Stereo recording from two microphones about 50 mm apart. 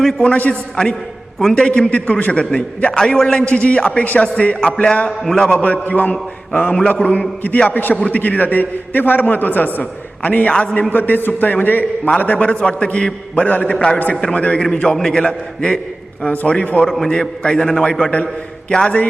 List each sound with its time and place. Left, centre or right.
0.2 s a man's voice: left
5.2 s a man's voice: centre
5.6 s a man's voice: left
10.5 s a man's voice: centre
10.8 s a man's voice: left
12.2 s a man's voice: left
13.7 s a man's voice: centre
14.3 s a man's voice: left
14.6 s a man's voice: centre
16.2 s a man's voice: left
16.8 s a man's voice: centre
17.1 s a man's voice: centre